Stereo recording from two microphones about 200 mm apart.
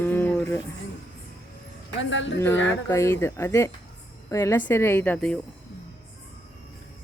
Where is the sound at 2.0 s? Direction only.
65° left (ahead or behind).